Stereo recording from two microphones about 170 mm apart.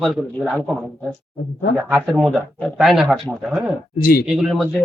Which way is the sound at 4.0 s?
60° left (ahead or behind).